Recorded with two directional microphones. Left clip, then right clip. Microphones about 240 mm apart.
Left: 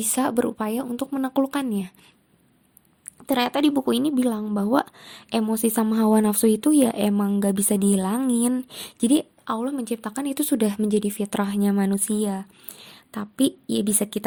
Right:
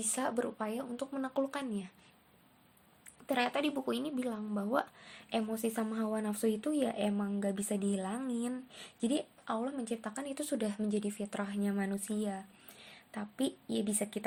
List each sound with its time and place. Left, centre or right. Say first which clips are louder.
0.0 s speech: left 12 dB; left
3.2 s speech: left 11 dB; left